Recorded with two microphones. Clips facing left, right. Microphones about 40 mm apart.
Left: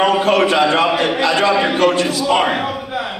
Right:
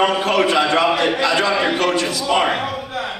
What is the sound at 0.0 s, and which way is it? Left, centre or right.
A man's voice, left.